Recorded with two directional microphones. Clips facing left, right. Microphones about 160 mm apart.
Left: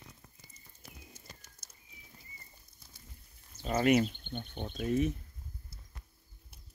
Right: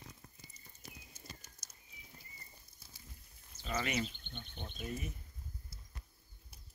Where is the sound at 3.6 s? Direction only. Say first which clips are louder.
Left 11 dB; 45° left (ahead or behind).